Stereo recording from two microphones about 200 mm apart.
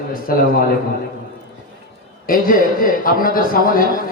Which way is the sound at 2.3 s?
45° left (ahead or behind).